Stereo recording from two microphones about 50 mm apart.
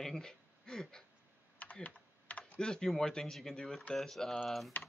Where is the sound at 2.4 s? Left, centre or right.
Centre.